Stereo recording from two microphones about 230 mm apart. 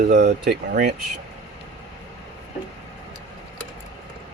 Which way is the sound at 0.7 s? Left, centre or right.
Right.